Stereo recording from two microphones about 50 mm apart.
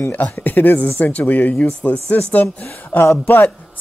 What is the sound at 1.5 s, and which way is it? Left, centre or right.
Speech, left.